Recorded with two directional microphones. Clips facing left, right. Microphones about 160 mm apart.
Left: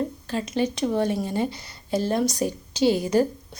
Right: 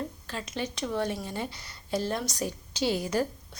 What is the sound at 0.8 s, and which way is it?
Speech, 30° left (ahead or behind).